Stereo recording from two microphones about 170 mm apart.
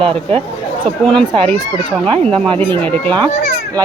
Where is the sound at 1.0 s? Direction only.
5° left (ahead or behind).